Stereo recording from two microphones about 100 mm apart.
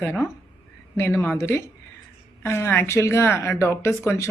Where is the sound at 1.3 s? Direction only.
25° left (ahead or behind).